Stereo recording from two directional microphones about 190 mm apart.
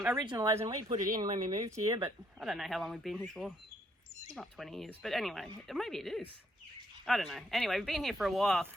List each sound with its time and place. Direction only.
0.0 s speech: 10° right (ahead or behind)
2.4 s speech: centre (ahead or behind)